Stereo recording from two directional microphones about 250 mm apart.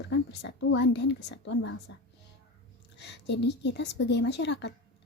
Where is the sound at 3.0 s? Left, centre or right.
Left.